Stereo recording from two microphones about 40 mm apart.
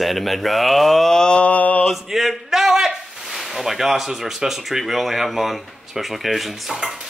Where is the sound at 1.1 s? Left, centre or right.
Left.